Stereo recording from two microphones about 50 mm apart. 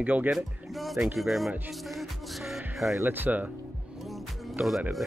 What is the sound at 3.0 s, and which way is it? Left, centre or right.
Speech, right.